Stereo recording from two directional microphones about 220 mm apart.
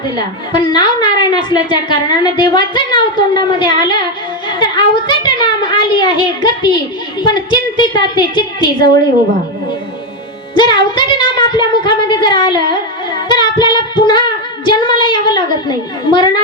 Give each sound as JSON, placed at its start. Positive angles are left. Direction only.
{"t": 0.2, "sound": "a woman's voice", "side_deg": 20}
{"t": 4.6, "sound": "a sound", "side_deg": 20}
{"t": 7.2, "sound": "a woman's voice", "side_deg": 20}
{"t": 10.5, "sound": "a woman's voice", "side_deg": 20}
{"t": 13.2, "sound": "child singing", "side_deg": 20}
{"t": 16.1, "sound": "a woman's voice", "side_deg": 20}